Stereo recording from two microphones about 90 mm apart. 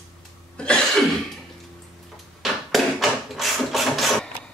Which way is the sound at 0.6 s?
10° left (ahead or behind).